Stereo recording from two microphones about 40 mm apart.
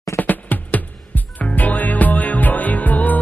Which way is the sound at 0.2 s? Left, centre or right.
Left.